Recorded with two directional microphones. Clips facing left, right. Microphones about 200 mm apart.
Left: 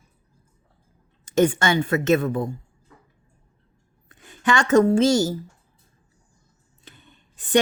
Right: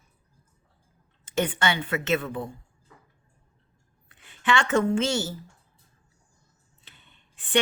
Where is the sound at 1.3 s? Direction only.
45° left (ahead or behind).